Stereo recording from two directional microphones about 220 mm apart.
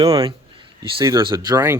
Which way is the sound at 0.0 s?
15° right (ahead or behind).